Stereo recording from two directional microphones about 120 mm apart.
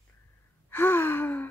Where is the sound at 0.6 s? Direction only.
20° left (ahead or behind).